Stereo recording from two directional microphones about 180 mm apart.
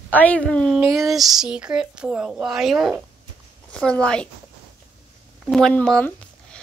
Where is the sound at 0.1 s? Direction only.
10° left (ahead or behind).